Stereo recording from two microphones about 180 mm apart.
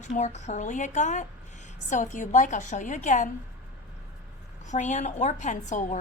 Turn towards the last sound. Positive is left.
turn(degrees=45)  # may be behind; listen again after turning